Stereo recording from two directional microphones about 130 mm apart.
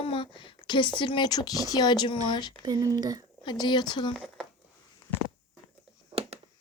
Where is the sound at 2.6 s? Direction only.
25° right (ahead or behind).